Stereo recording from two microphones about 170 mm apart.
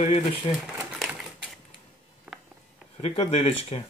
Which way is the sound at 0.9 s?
Centre (ahead or behind).